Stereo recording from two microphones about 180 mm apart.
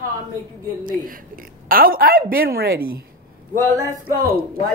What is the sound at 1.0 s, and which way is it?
A woman's voice, 50° right (ahead or behind).